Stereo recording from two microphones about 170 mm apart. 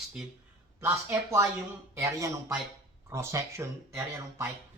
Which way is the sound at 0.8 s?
15° right (ahead or behind).